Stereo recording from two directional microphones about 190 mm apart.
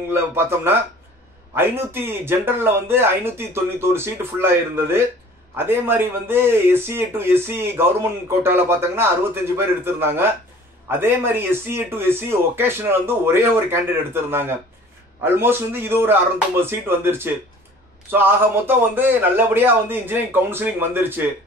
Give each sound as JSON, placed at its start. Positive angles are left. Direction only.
{"t": 0.1, "sound": "speech", "side_deg": -10}